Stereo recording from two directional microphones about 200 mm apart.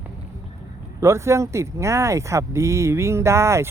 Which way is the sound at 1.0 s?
15° right (ahead or behind).